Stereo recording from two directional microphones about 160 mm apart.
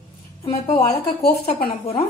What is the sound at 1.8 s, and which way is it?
Speech, 35° left (ahead or behind).